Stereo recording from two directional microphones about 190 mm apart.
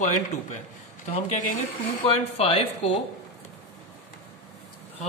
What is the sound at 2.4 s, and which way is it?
Mantra, 30° left (ahead or behind).